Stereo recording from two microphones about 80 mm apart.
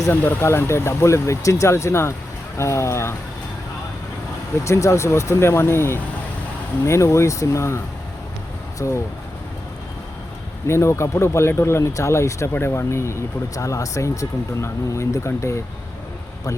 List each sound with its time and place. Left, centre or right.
0.1 s speech: left
4.6 s speech: left
8.8 s speech: left
10.7 s speech: left